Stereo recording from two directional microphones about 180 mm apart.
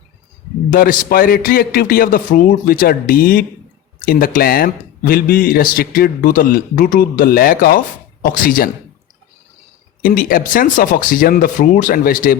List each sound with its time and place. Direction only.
0.7 s a man's voice: 50° left (ahead or behind)
10.0 s a man's voice: 50° left (ahead or behind)